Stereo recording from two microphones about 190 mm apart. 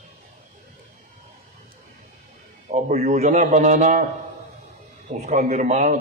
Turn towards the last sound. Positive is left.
turn(degrees=-40)  # may be behind; listen again after turning